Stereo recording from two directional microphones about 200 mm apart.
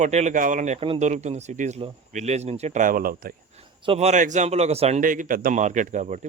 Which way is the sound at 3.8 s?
30° right (ahead or behind).